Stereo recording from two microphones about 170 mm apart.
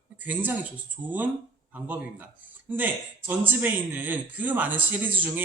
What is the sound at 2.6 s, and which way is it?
A man's voice, 10° right (ahead or behind).